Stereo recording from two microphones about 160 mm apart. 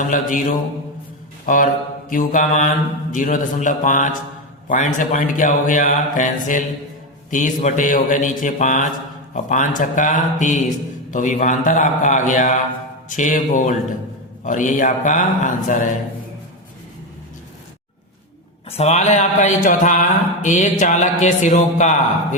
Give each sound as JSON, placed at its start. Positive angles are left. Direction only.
{"t": 0.1, "sound": "mantra", "side_deg": 55}
{"t": 18.8, "sound": "mantra", "side_deg": 45}